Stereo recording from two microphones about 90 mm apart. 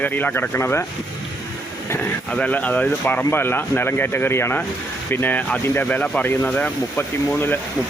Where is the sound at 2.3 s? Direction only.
15° left (ahead or behind).